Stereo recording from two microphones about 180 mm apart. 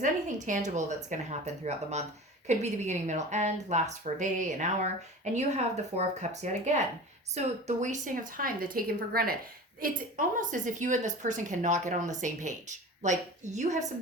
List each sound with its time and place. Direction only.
0.4 s a woman's voice: 45° right (ahead or behind)